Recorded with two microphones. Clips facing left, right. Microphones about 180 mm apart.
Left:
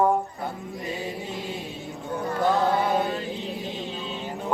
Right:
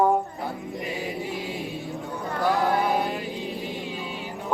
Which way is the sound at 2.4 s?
20° left (ahead or behind).